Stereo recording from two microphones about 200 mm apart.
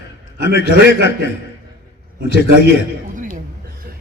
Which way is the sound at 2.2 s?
55° left (ahead or behind).